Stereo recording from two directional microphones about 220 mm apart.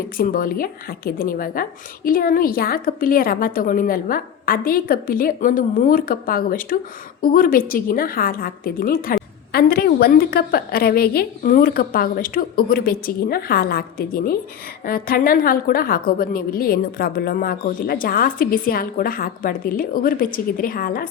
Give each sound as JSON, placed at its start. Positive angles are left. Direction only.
{"t": 0.2, "sound": "a woman's voice", "side_deg": 40}